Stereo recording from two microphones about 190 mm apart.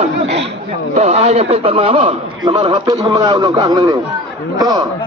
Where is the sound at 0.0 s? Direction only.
35° right (ahead or behind).